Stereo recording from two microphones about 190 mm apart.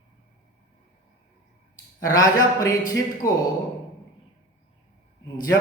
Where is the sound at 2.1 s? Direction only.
20° left (ahead or behind).